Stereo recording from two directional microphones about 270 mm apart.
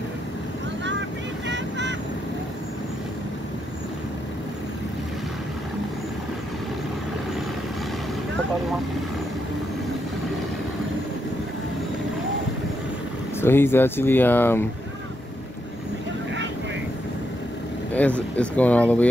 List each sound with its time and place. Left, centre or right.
1.5 s vehicle: right
13.4 s speech: centre
17.9 s speech: centre